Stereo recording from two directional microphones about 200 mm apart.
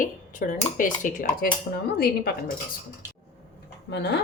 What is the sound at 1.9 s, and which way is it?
Speech, 50° left (ahead or behind).